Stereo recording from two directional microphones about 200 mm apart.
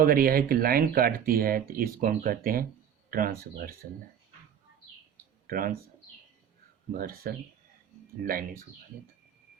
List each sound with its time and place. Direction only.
0.0 s speech: 45° right (ahead or behind)
5.5 s speech: 45° right (ahead or behind)
6.9 s speech: 45° right (ahead or behind)